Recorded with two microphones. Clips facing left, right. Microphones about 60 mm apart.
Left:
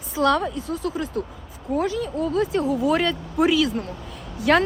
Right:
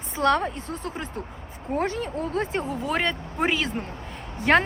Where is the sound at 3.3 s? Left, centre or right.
Right.